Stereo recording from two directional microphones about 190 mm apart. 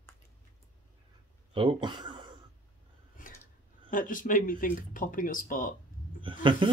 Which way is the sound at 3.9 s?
45° left (ahead or behind).